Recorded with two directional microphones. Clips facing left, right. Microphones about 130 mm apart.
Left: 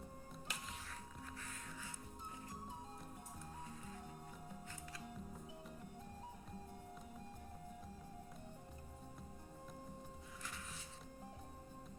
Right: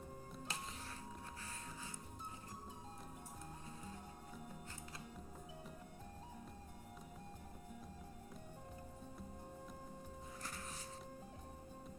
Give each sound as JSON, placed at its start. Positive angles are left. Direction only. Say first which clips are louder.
{"t": 0.4, "sound": "music", "louder": "right 2 dB", "side_deg": -30}
{"t": 10.4, "sound": "music", "louder": "right 1 dB", "side_deg": -40}